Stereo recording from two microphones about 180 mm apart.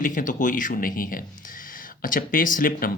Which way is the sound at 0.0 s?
45° left (ahead or behind).